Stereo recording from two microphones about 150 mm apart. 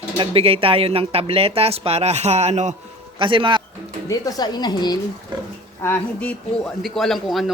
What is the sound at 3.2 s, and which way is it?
Speech, 35° right (ahead or behind).